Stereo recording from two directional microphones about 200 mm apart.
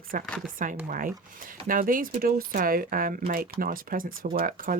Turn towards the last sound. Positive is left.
turn(degrees=-45)  # may be behind; listen again after turning